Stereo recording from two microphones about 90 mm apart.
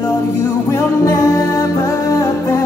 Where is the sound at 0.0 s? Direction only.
40° left (ahead or behind).